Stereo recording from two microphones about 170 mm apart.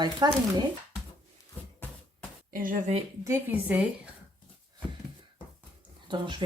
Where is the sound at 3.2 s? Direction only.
15° right (ahead or behind).